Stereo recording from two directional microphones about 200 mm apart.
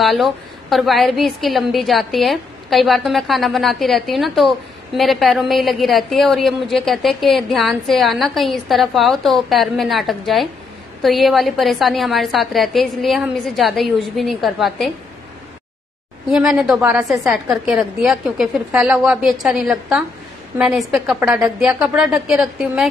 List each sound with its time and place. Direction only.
0.0 s a woman's voice: centre (ahead or behind)
16.3 s a woman's voice: centre (ahead or behind)